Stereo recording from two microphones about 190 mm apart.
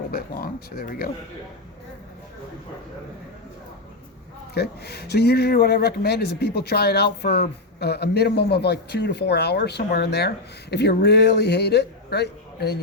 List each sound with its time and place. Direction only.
0.1 s speech: 50° left (ahead or behind)
4.5 s speech: 55° left (ahead or behind)